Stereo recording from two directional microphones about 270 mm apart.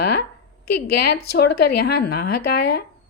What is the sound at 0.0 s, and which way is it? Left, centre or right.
Speech, left.